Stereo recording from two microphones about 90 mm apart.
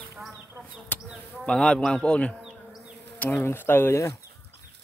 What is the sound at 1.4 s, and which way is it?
Speech, 10° left (ahead or behind).